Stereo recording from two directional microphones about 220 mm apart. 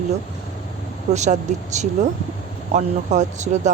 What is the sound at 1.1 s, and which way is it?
Speech, 30° right (ahead or behind).